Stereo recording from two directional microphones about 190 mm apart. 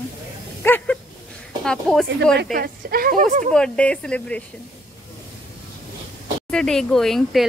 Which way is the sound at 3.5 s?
5° left (ahead or behind).